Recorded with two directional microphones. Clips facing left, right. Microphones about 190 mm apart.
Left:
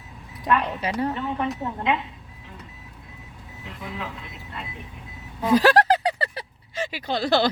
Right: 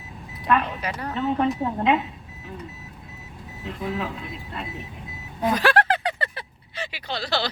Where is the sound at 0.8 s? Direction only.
25° left (ahead or behind).